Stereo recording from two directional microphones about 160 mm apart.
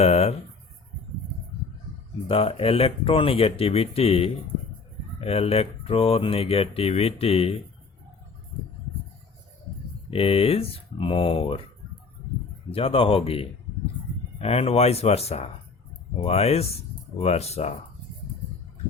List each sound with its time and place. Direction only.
0.0 s speech: 40° left (ahead or behind)
2.2 s speech: 35° left (ahead or behind)
10.1 s speech: 35° left (ahead or behind)
12.7 s speech: 35° left (ahead or behind)